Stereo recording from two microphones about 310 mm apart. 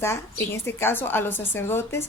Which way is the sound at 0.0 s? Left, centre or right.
Centre.